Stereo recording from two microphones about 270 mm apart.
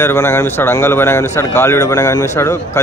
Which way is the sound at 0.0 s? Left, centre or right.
Centre.